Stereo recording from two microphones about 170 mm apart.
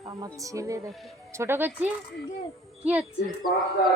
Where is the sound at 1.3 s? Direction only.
15° right (ahead or behind).